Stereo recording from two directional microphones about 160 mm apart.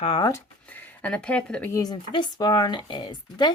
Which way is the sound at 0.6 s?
10° left (ahead or behind).